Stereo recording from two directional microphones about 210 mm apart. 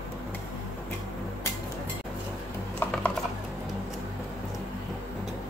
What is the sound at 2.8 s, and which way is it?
Typing, 10° left (ahead or behind).